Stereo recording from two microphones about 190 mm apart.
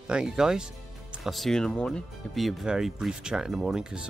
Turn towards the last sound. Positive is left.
turn(degrees=-5)  # may be behind; listen again after turning